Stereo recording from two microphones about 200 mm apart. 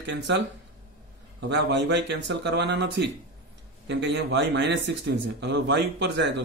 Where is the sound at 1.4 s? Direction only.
60° right (ahead or behind).